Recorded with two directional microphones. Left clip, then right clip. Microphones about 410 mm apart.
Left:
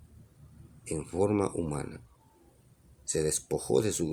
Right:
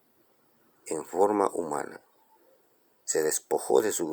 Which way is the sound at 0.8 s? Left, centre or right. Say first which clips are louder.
Right 5 dB; centre.